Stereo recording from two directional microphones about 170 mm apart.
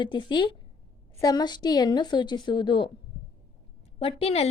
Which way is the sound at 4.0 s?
35° left (ahead or behind).